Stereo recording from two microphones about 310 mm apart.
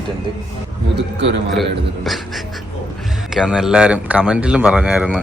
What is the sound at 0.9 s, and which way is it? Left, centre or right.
Speech, right.